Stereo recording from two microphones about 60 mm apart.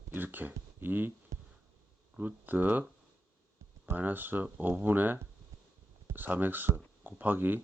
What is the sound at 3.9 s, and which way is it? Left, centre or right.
Speech, right.